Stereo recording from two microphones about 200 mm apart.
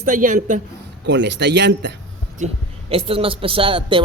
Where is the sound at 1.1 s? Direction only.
60° right (ahead or behind).